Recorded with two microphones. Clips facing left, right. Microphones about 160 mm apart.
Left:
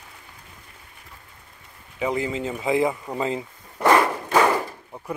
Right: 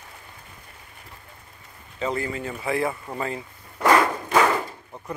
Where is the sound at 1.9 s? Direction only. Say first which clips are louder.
Left 2 dB; 15° left (ahead or behind).